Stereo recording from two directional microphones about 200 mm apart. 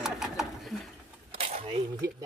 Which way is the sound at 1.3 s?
30° right (ahead or behind).